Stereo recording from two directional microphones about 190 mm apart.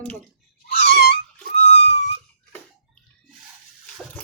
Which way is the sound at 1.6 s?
35° left (ahead or behind).